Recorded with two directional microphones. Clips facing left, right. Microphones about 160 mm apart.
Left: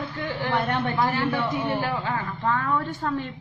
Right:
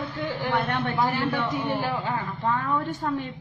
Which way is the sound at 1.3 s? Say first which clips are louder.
Left 1 dB; 10° left (ahead or behind).